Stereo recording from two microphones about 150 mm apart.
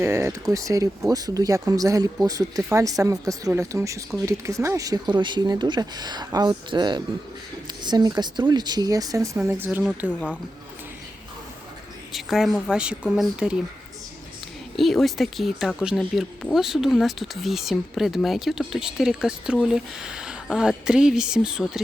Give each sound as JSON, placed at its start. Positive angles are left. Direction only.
{"t": 0.0, "sound": "speech", "side_deg": -15}
{"t": 9.4, "sound": "speech", "side_deg": -5}
{"t": 10.1, "sound": "speech", "side_deg": 10}
{"t": 12.1, "sound": "speech", "side_deg": 0}
{"t": 14.8, "sound": "speech", "side_deg": 0}